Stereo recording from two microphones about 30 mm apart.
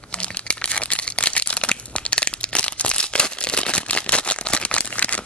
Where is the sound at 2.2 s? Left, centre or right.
Left.